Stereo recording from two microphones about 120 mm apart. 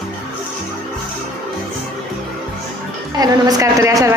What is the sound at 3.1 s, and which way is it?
Speech, 30° right (ahead or behind).